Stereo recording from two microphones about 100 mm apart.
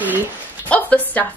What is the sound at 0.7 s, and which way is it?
Speech, 15° left (ahead or behind).